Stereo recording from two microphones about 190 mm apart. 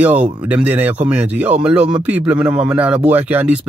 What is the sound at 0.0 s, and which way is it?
Speech, 5° right (ahead or behind).